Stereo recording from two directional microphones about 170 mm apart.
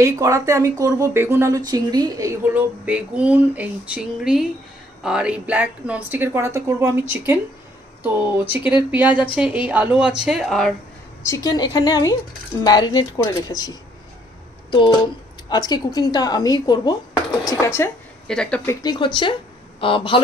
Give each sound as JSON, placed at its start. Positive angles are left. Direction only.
{"t": 0.0, "sound": "speech", "side_deg": -20}
{"t": 11.2, "sound": "speech", "side_deg": 20}
{"t": 18.2, "sound": "speech", "side_deg": 5}
{"t": 18.7, "sound": "speech", "side_deg": 20}